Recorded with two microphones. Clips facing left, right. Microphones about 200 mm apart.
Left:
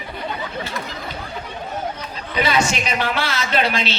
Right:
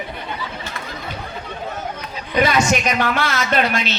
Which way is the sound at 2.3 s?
50° right (ahead or behind).